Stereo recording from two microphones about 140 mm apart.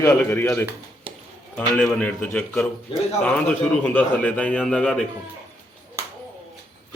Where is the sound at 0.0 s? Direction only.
15° left (ahead or behind).